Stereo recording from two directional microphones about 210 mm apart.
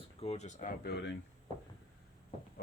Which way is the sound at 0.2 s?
30° left (ahead or behind).